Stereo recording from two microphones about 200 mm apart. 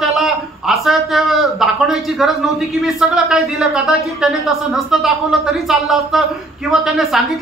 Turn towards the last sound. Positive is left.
turn(degrees=0)  # may be behind; listen again after turning